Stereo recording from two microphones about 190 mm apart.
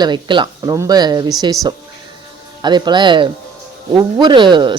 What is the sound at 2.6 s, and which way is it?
A woman's voice, 25° right (ahead or behind).